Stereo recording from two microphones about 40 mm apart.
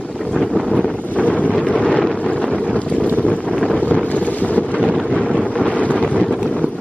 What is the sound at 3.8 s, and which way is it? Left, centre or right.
Boat, left.